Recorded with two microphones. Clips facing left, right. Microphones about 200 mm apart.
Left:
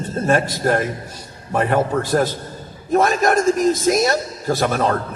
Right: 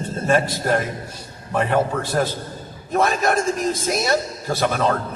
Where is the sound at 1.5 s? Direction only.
50° left (ahead or behind).